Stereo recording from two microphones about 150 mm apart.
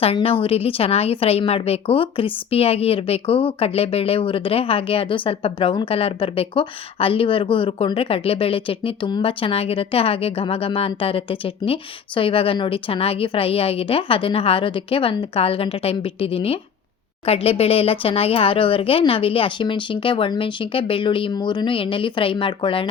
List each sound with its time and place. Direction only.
0.0 s a woman's voice: 40° left (ahead or behind)